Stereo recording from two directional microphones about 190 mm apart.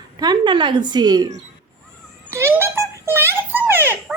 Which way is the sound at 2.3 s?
15° right (ahead or behind).